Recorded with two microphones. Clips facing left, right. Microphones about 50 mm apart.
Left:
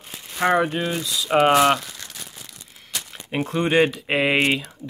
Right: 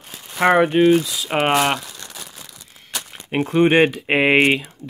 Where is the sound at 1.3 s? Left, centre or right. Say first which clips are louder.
Left 2 dB; centre.